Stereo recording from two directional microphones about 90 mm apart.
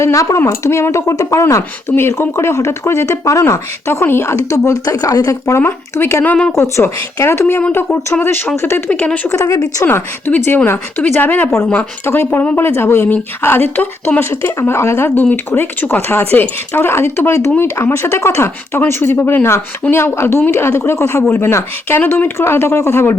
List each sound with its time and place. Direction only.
0.0 s speech: 35° left (ahead or behind)
1.9 s speech: 25° left (ahead or behind)
8.9 s speech: 15° left (ahead or behind)
9.3 s speech: 35° left (ahead or behind)
9.8 s speech: 25° left (ahead or behind)